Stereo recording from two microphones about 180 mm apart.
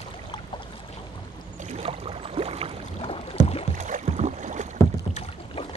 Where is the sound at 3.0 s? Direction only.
35° left (ahead or behind).